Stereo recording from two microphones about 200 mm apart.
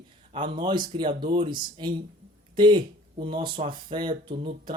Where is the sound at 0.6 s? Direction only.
20° right (ahead or behind).